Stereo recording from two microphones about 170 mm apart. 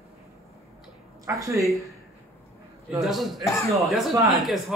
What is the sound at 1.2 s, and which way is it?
Speech, 20° right (ahead or behind).